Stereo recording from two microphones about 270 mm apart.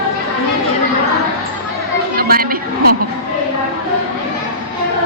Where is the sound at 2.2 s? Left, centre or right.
Right.